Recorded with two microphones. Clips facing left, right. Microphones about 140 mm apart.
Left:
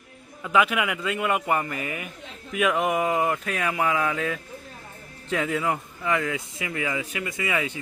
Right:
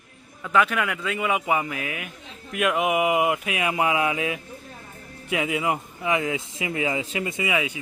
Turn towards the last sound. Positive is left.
turn(degrees=-20)  # may be behind; listen again after turning